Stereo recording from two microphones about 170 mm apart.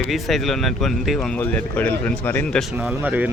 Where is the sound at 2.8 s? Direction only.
10° right (ahead or behind).